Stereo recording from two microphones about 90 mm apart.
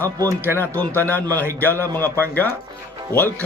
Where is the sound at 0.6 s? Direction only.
20° left (ahead or behind).